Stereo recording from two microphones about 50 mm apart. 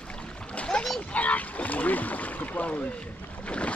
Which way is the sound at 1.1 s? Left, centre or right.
Left.